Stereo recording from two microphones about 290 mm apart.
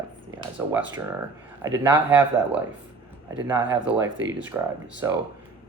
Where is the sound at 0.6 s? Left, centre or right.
Centre.